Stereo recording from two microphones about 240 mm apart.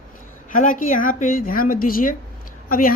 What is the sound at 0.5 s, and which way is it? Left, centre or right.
Speech, left.